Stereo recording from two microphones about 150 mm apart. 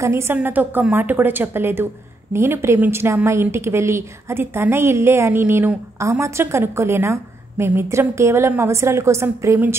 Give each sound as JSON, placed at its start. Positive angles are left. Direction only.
{"t": 0.0, "sound": "a woman's voice", "side_deg": -20}